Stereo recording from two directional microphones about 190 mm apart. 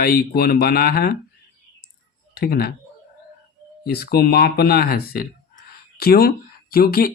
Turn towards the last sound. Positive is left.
turn(degrees=50)  # may be behind; listen again after turning